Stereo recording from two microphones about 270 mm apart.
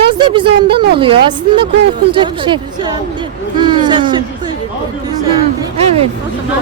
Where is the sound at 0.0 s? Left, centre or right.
Centre.